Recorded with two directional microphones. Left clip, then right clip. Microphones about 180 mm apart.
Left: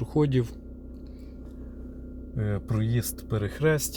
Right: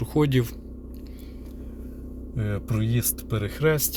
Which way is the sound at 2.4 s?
40° left (ahead or behind).